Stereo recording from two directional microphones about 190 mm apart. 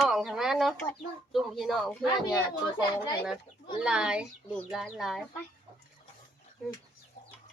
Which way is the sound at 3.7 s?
5° right (ahead or behind).